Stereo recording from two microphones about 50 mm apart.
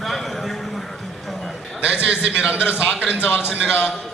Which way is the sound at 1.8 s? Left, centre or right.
Right.